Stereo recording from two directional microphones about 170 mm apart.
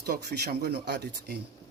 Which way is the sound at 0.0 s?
70° right (ahead or behind).